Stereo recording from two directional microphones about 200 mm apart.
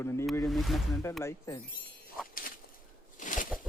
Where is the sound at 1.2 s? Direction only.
15° left (ahead or behind).